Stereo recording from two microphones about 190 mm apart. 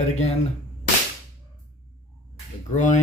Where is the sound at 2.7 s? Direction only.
40° left (ahead or behind).